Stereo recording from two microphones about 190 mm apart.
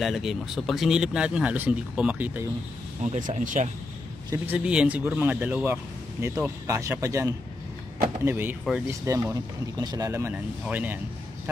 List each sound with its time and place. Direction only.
0.0 s speech: centre (ahead or behind)
3.0 s speech: 40° right (ahead or behind)
4.3 s speech: 5° right (ahead or behind)